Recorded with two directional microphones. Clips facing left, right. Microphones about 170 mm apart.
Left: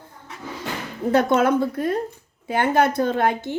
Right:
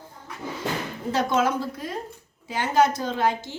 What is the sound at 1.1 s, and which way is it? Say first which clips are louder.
A woman's voice: left 5 dB; 55° left (ahead or behind).